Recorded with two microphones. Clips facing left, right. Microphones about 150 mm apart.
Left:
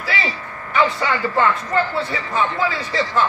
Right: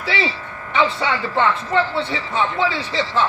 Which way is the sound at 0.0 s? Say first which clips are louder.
Right 2 dB; 25° right (ahead or behind).